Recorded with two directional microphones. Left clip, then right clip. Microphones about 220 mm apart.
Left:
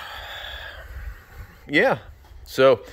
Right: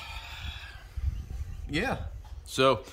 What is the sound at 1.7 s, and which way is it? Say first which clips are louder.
Speech: left 12 dB; 10° left (ahead or behind).